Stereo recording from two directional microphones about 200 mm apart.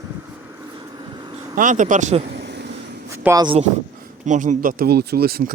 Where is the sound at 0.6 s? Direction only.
20° right (ahead or behind).